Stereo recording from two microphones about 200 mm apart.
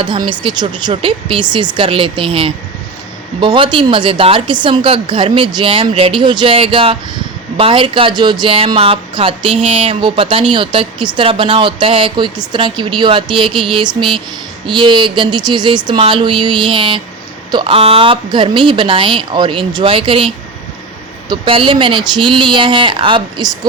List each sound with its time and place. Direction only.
0.3 s speech: 20° right (ahead or behind)